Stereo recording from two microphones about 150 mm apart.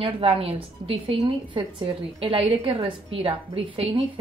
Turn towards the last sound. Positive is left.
turn(degrees=-40)  # may be behind; listen again after turning